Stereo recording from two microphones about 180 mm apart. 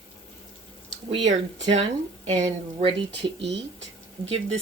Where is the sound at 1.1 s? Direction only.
25° right (ahead or behind).